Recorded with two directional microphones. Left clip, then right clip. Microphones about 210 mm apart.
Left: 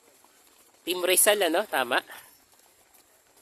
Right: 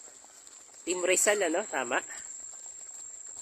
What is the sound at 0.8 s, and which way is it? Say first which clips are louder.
Speech: left 3 dB; 15° left (ahead or behind).